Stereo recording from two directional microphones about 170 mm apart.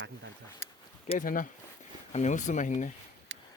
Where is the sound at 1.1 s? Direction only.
50° left (ahead or behind).